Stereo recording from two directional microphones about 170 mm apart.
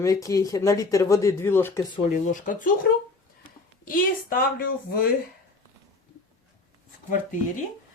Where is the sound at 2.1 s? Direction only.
50° left (ahead or behind).